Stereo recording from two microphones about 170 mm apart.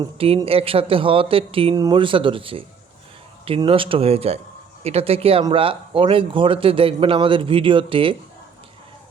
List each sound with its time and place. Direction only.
0.0 s speech: 35° right (ahead or behind)